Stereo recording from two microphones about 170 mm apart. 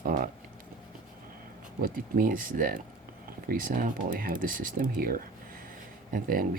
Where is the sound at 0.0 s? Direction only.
55° right (ahead or behind).